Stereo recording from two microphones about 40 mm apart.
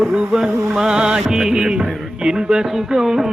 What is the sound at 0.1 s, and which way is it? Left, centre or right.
Music, right.